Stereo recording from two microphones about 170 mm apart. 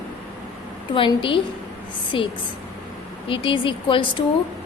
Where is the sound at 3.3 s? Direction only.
30° left (ahead or behind).